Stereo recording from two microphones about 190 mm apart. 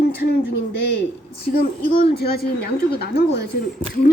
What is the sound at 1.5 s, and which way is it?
A woman's voice, 50° left (ahead or behind).